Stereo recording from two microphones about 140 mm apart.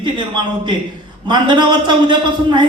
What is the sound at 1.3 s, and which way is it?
A man's voice, 30° right (ahead or behind).